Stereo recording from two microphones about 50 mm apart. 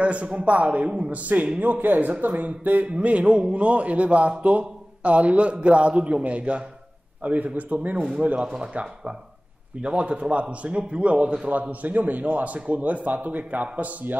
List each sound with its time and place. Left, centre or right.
0.0 s a man's voice: right